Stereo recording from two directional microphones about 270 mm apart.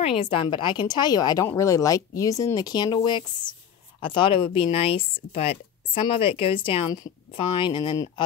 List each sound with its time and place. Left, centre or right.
0.0 s speech: centre